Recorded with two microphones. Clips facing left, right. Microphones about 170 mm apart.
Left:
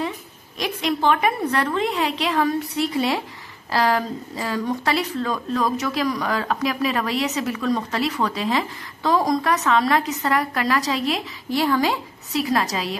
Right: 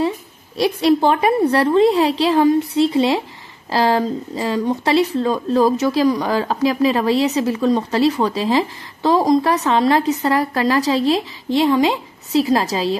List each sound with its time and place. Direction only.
0.6 s a woman's voice: 35° right (ahead or behind)